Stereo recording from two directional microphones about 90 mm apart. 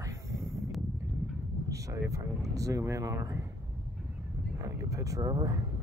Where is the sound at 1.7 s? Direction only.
35° right (ahead or behind).